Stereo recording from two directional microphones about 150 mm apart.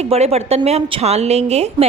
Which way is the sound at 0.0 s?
45° right (ahead or behind).